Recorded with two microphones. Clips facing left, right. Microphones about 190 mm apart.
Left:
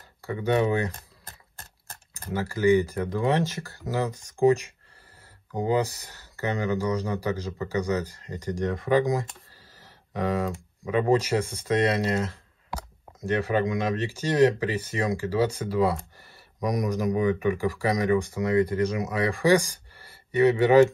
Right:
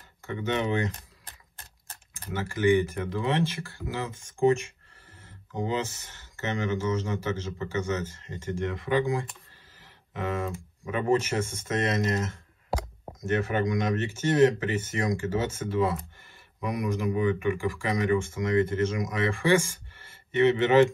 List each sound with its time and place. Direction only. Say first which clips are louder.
0.2 s speech: left 5 dB; 35° left (ahead or behind)
1.2 s a sound: left 3 dB; 40° left (ahead or behind)
3.3 s speech: left 2 dB; 35° left (ahead or behind)